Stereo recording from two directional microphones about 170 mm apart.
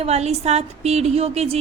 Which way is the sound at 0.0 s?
40° right (ahead or behind).